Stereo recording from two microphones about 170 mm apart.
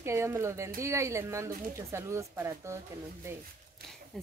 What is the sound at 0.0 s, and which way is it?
Speech, 15° right (ahead or behind).